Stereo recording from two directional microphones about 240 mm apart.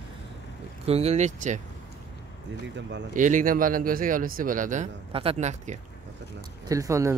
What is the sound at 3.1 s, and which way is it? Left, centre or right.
Speech, right.